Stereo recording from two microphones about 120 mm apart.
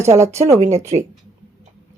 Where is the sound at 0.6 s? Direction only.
75° right (ahead or behind).